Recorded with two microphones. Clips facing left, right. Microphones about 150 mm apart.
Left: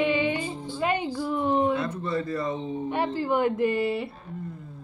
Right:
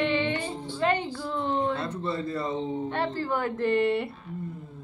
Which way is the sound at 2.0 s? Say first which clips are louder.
Left 2 dB; 25° right (ahead or behind).